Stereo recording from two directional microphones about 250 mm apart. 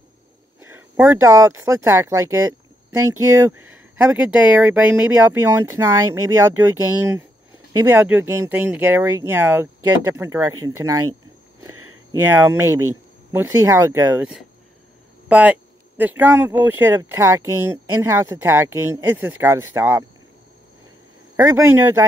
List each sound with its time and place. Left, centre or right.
0.6 s speech: centre
7.7 s speech: centre
11.7 s a sound: right
12.1 s speech: centre
21.4 s speech: centre